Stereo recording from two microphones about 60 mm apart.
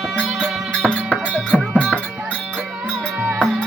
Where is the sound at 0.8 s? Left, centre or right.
Centre.